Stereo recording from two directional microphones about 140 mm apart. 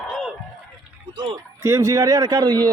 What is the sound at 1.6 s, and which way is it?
Speech, 20° right (ahead or behind).